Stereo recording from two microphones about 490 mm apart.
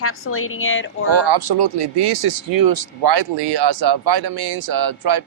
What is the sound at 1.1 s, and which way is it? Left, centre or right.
Speech, right.